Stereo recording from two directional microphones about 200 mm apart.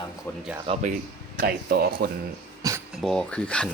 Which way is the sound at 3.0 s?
5° left (ahead or behind).